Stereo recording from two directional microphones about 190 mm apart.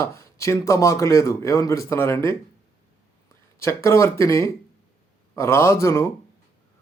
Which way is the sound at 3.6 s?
15° left (ahead or behind).